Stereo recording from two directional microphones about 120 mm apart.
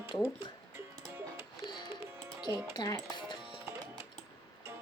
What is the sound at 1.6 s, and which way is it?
Music, 40° left (ahead or behind).